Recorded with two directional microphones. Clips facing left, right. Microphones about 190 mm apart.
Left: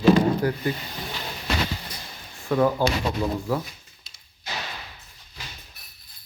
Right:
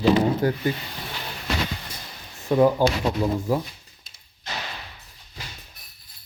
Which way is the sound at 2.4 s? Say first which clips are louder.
Right 3 dB; 20° right (ahead or behind).